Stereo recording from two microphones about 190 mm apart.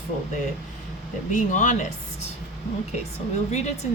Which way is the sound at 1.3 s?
40° left (ahead or behind).